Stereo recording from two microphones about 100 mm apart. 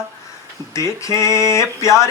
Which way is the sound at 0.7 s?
30° left (ahead or behind).